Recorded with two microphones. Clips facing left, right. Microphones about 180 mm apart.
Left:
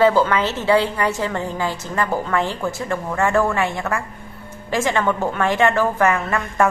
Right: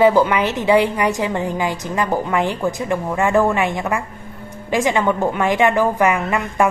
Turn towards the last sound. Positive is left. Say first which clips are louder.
# right 2 dB
turn(degrees=-15)  # may be behind; listen again after turning